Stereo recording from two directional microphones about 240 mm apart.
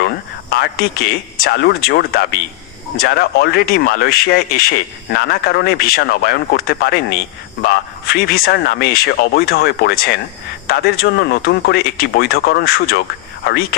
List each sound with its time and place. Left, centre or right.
0.5 s speech: left